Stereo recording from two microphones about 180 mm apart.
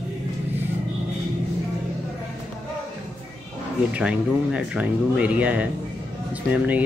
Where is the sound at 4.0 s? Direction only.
5° right (ahead or behind).